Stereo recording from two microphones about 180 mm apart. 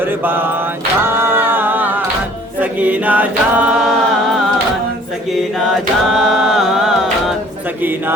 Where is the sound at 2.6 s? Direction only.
10° right (ahead or behind).